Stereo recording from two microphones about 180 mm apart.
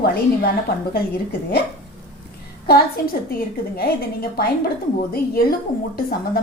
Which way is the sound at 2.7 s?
55° left (ahead or behind).